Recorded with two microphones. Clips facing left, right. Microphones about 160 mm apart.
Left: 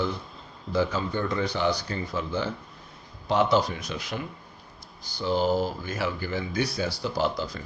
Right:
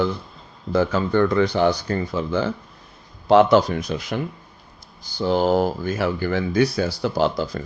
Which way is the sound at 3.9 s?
45° right (ahead or behind).